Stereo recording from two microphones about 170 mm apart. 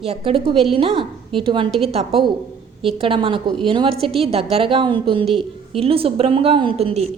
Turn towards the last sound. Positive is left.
turn(degrees=-35)  # may be behind; listen again after turning